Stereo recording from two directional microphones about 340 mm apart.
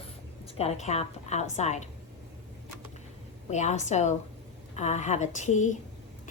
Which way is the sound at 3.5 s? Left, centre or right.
Centre.